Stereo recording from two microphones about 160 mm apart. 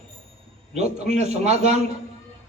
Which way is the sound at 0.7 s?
45° right (ahead or behind).